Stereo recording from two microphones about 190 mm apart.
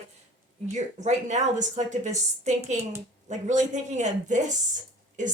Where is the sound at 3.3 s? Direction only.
40° right (ahead or behind).